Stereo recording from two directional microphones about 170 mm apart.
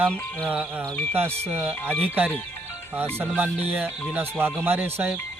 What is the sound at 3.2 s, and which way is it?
Music, 10° right (ahead or behind).